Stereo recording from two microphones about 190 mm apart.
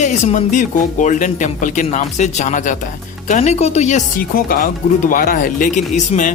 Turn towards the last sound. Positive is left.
turn(degrees=40)  # may be behind; listen again after turning